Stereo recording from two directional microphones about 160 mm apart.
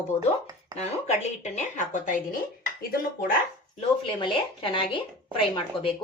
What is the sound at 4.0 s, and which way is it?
A woman's voice, 30° left (ahead or behind).